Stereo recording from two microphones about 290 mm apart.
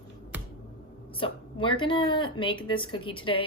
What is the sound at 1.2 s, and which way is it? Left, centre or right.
A woman's voice, centre.